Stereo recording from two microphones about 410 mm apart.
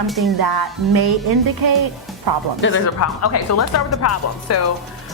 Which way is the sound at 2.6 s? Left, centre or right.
Left.